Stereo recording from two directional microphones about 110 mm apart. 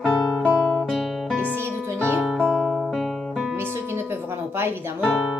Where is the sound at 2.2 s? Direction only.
Centre (ahead or behind).